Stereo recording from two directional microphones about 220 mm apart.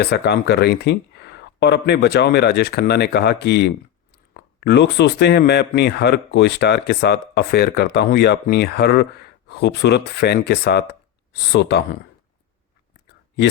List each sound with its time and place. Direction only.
0.0 s speech: 50° left (ahead or behind)